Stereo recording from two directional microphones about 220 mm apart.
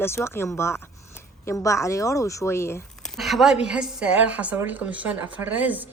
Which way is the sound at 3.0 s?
Centre (ahead or behind).